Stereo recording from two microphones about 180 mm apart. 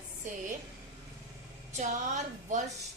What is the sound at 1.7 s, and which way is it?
Speech, 40° right (ahead or behind).